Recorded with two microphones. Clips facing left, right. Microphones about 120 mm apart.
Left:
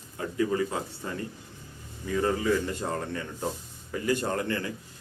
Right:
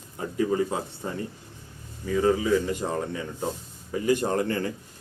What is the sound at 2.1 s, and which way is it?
Speech, 5° right (ahead or behind).